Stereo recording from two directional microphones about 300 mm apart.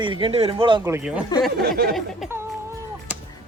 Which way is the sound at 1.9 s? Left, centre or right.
Centre.